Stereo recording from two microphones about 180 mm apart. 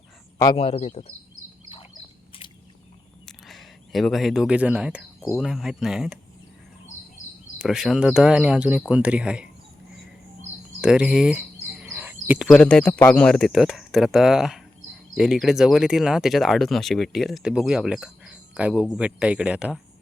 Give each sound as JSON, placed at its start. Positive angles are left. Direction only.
{"t": 0.5, "sound": "speech", "side_deg": 35}
{"t": 3.2, "sound": "speech", "side_deg": 0}
{"t": 7.6, "sound": "speech", "side_deg": 0}
{"t": 10.8, "sound": "a sound", "side_deg": -5}
{"t": 12.5, "sound": "speech", "side_deg": 5}